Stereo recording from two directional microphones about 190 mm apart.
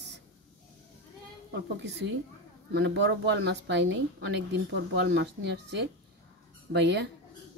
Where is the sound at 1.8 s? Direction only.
70° right (ahead or behind).